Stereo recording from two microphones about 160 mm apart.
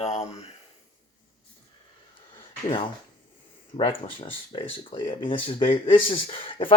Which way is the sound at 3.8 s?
35° left (ahead or behind).